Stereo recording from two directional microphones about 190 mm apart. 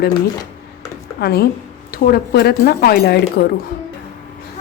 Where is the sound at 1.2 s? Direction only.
55° left (ahead or behind).